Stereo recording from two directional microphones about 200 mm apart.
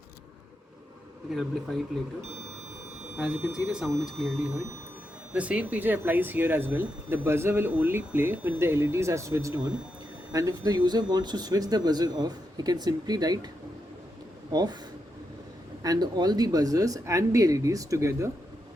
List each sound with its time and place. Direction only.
1.3 s speech: centre (ahead or behind)
3.4 s speech: 5° right (ahead or behind); by 13.5 s 20° right (ahead or behind)
14.5 s speech: 20° right (ahead or behind)
15.8 s speech: 20° right (ahead or behind)